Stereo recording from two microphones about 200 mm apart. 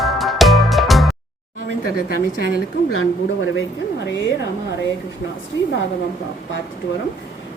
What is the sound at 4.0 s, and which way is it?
Speech, 60° left (ahead or behind).